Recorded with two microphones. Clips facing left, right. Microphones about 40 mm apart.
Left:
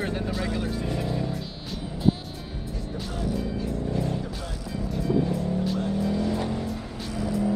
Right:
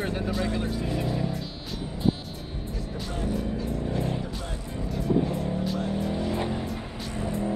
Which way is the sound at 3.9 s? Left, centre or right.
Right.